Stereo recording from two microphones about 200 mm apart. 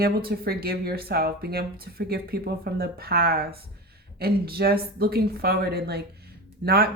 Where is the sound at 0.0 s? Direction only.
50° right (ahead or behind).